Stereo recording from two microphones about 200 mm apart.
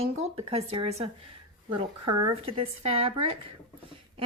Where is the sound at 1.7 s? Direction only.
20° right (ahead or behind).